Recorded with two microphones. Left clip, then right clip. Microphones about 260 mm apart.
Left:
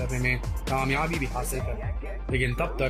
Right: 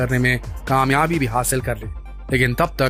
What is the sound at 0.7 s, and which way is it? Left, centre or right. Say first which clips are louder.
Speech: right 10 dB; right.